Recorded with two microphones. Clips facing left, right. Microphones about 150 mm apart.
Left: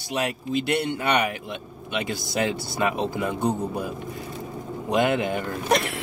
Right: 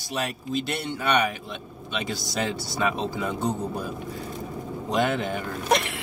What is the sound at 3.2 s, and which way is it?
Speech, 10° left (ahead or behind).